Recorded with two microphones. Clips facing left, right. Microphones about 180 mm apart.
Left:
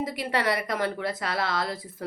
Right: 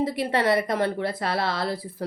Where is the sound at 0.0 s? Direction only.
25° right (ahead or behind).